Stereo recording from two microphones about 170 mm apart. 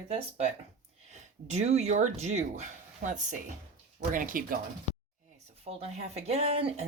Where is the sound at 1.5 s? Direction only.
40° right (ahead or behind).